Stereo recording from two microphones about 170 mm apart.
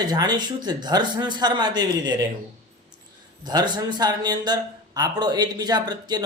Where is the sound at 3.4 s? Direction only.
25° right (ahead or behind).